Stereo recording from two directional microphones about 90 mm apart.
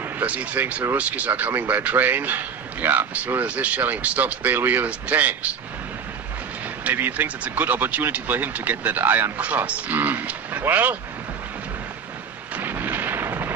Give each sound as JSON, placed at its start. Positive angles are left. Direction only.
{"t": 0.2, "sound": "speech", "side_deg": -15}
{"t": 6.8, "sound": "speech", "side_deg": -25}
{"t": 12.5, "sound": "artillery fire", "side_deg": -20}